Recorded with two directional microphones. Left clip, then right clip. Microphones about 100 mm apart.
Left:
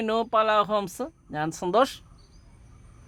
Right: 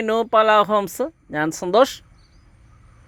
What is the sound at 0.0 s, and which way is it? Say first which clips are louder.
Speech: right 6 dB; 30° right (ahead or behind).